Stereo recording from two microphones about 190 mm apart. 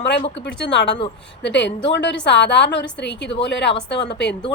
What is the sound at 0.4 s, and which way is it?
A woman's voice, 65° left (ahead or behind).